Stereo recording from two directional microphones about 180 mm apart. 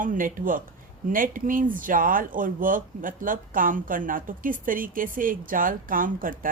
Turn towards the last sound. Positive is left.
turn(degrees=-50)  # may be behind; listen again after turning